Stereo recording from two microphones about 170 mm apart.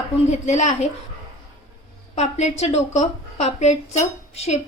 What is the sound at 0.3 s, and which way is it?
Speech, 40° left (ahead or behind).